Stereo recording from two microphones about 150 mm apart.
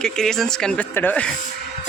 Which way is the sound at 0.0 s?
5° left (ahead or behind).